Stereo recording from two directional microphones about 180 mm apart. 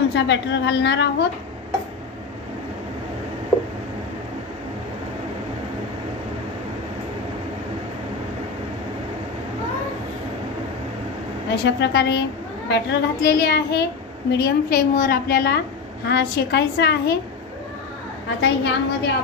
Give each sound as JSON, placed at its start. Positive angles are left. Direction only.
{"t": 0.1, "sound": "a child's voice", "side_deg": 85}
{"t": 11.6, "sound": "a child's voice", "side_deg": 70}
{"t": 18.4, "sound": "a child's voice", "side_deg": 75}